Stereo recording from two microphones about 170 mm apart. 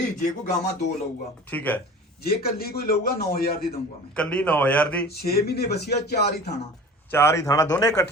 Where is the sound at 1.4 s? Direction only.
10° left (ahead or behind).